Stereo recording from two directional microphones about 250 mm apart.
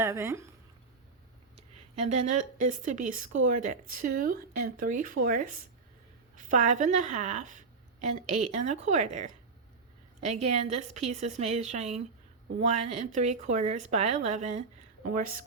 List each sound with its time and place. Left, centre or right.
0.0 s speech: centre
2.0 s a woman's voice: right